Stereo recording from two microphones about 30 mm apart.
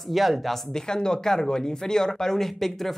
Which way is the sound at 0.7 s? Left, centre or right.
Left.